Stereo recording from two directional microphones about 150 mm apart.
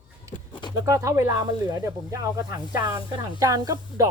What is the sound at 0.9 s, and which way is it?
Speech, 20° right (ahead or behind).